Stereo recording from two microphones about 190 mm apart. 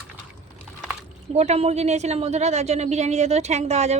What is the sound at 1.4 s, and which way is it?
A woman's voice, 35° right (ahead or behind).